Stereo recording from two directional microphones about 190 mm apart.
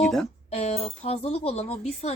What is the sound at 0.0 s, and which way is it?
Speech, centre (ahead or behind).